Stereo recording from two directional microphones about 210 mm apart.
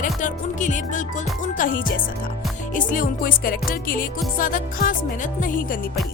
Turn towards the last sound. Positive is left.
turn(degrees=40)  # may be behind; listen again after turning